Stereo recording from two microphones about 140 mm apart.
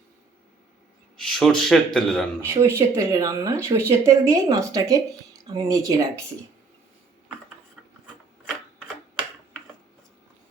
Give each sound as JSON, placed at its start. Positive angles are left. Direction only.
{"t": 1.1, "sound": "a man's voice", "side_deg": 5}
{"t": 2.4, "sound": "speech", "side_deg": -20}